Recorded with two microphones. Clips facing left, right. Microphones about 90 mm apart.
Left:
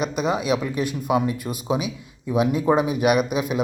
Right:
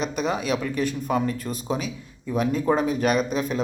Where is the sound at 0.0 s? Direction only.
5° left (ahead or behind).